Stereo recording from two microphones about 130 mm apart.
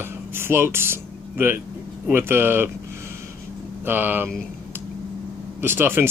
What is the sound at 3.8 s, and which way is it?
Speech, 15° right (ahead or behind).